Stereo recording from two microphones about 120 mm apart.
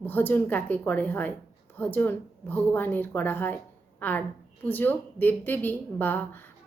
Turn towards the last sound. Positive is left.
turn(degrees=15)  # may be behind; listen again after turning